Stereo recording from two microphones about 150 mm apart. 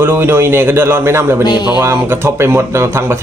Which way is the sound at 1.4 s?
30° left (ahead or behind).